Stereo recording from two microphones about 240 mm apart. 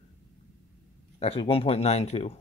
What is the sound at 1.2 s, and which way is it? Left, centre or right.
Speech, left.